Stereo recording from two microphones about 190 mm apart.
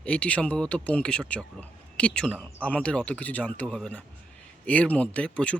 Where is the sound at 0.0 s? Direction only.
5° left (ahead or behind).